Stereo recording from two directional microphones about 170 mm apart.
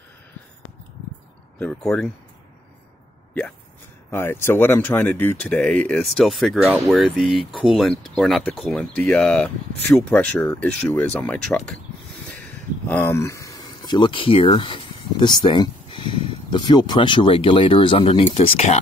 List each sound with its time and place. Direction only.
1.6 s speech: 5° left (ahead or behind)
4.1 s speech: 15° left (ahead or behind)
12.8 s speech: 10° left (ahead or behind); by 18.8 s 40° left (ahead or behind)